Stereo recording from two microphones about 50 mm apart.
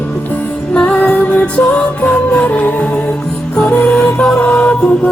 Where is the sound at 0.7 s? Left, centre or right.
Left.